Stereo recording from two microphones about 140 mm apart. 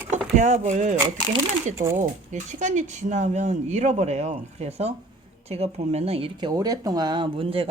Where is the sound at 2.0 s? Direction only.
60° right (ahead or behind).